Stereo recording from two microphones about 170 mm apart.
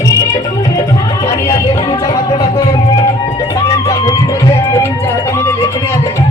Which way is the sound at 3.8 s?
20° left (ahead or behind).